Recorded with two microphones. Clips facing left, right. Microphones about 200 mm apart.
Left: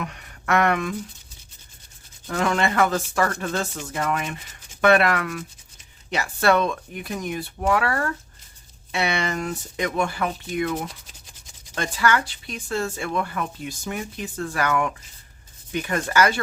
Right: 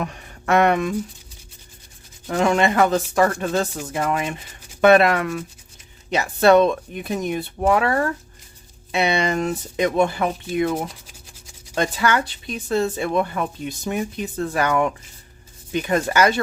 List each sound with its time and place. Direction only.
0.0 s speech: 25° right (ahead or behind)
2.2 s speech: 20° right (ahead or behind)
3.8 s rub: 15° right (ahead or behind)
4.1 s speech: 25° right (ahead or behind)